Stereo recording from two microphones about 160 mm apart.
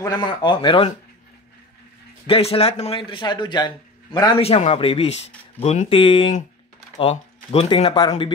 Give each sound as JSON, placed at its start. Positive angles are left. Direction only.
{"t": 0.0, "sound": "speech", "side_deg": 30}
{"t": 2.2, "sound": "a man's voice", "side_deg": 35}
{"t": 4.4, "sound": "a man's voice", "side_deg": 40}